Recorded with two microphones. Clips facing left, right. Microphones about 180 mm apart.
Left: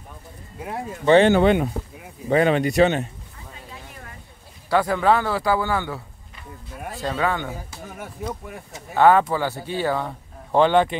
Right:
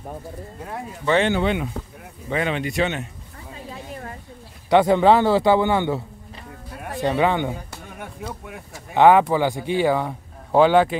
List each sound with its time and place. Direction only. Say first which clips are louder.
0.7 s speech: left 5 dB; 25° left (ahead or behind)
1.3 s speech: left 5 dB; 50° left (ahead or behind)
4.6 s a man's voice: right 4 dB; 25° right (ahead or behind)
7.8 s speech: left 2 dB; centre (ahead or behind)
8.9 s a man's voice: right 2 dB; 15° right (ahead or behind)